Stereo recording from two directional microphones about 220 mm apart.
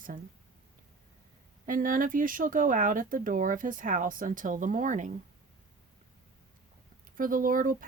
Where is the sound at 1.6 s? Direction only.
40° right (ahead or behind).